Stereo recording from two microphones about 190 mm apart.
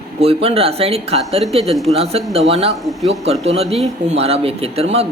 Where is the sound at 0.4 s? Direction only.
30° right (ahead or behind).